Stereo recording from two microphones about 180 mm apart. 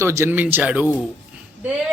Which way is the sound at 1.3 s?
5° right (ahead or behind).